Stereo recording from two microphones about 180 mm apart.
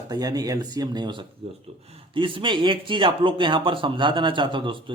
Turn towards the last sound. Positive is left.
turn(degrees=-30)  # may be behind; listen again after turning